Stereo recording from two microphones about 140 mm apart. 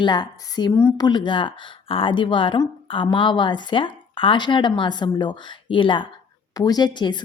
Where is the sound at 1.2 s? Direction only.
35° left (ahead or behind).